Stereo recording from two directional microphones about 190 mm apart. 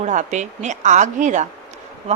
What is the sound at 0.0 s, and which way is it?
A woman's voice, 40° right (ahead or behind).